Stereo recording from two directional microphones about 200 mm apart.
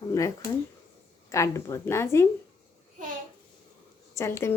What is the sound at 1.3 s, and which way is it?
Speech, 15° left (ahead or behind).